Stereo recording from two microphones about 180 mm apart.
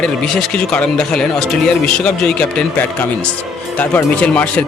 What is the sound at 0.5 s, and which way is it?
Speech, 5° left (ahead or behind).